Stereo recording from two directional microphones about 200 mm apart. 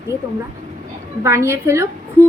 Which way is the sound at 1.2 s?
15° right (ahead or behind).